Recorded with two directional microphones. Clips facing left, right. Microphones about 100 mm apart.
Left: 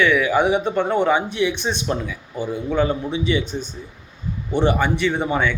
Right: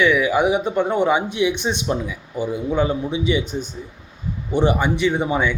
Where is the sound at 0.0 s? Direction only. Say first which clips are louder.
Even; 10° right (ahead or behind).